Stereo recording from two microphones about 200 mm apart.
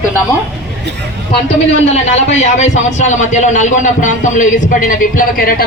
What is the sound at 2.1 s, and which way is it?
A man's voice, 35° left (ahead or behind).